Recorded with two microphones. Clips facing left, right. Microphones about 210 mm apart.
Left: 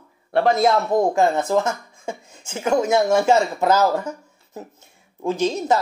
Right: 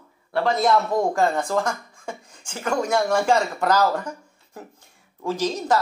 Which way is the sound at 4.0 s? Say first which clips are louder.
Left 3 dB; 25° left (ahead or behind).